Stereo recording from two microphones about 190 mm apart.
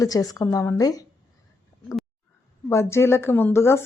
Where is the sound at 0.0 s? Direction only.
20° left (ahead or behind).